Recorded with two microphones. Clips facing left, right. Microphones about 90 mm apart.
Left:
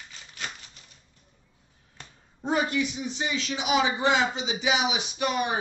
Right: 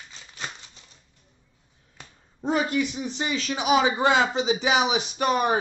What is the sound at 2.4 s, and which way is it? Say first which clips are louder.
A man's voice: right 2 dB; 35° right (ahead or behind).